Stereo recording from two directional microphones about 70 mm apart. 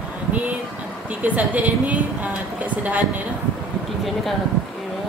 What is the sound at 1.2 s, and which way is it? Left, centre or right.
A woman's voice, right.